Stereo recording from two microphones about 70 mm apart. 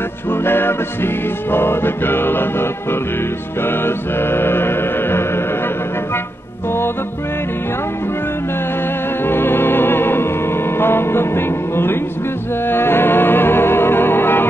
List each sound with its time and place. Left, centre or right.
0.3 s music: left
3.6 s music: left
9.2 s music: left